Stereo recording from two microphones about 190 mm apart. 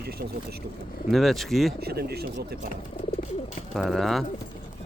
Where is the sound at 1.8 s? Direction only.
55° right (ahead or behind).